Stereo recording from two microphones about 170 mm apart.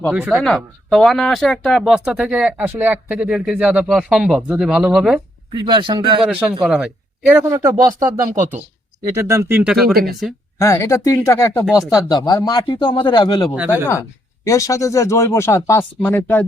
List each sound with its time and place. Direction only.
0.1 s speech: 5° right (ahead or behind)
0.4 s speech: 5° left (ahead or behind)
5.5 s speech: 25° right (ahead or behind)
6.2 s speech: 5° right (ahead or behind)
9.8 s speech: 65° right (ahead or behind)
10.6 s speech: 15° left (ahead or behind)
13.5 s speech: 10° right (ahead or behind)
13.8 s speech: 15° left (ahead or behind)